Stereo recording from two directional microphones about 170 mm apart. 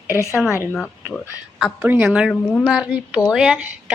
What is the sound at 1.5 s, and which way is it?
Speech, 10° right (ahead or behind).